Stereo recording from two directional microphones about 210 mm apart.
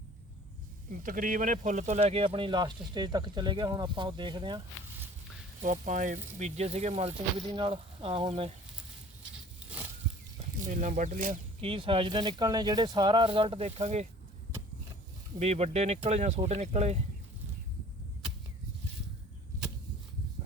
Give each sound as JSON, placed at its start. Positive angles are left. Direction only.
{"t": 0.9, "sound": "speech", "side_deg": -40}
{"t": 5.6, "sound": "speech", "side_deg": -35}
{"t": 10.6, "sound": "speech", "side_deg": -35}
{"t": 11.6, "sound": "speech", "side_deg": -25}
{"t": 15.4, "sound": "speech", "side_deg": -30}